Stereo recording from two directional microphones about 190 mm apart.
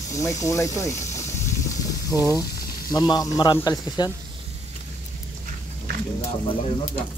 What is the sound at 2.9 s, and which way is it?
Speech, 20° left (ahead or behind).